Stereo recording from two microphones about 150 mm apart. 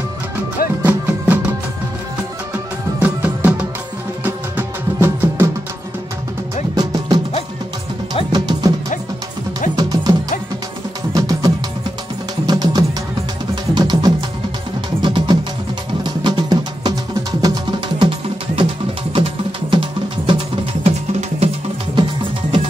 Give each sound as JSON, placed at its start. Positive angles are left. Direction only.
{"t": 0.8, "sound": "music", "side_deg": -10}
{"t": 3.0, "sound": "music", "side_deg": -10}
{"t": 6.7, "sound": "music", "side_deg": -25}
{"t": 8.3, "sound": "music", "side_deg": -25}
{"t": 9.8, "sound": "music", "side_deg": -25}
{"t": 11.1, "sound": "music", "side_deg": -25}
{"t": 19.1, "sound": "music", "side_deg": -35}